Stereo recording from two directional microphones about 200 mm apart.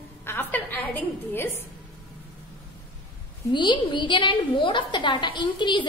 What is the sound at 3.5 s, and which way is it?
A woman's voice, 25° left (ahead or behind).